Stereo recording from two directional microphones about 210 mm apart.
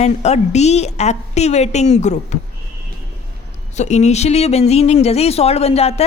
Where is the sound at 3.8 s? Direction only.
35° left (ahead or behind).